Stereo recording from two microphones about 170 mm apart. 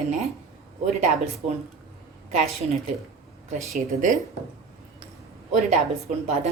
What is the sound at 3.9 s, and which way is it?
Speech, 45° right (ahead or behind).